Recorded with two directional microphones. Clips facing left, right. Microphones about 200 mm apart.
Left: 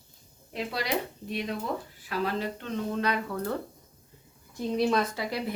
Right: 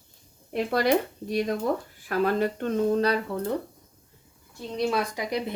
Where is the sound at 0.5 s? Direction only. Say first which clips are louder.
Right 8 dB; 50° right (ahead or behind).